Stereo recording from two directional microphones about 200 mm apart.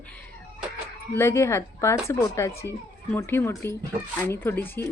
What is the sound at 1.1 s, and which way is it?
Speech, 15° left (ahead or behind).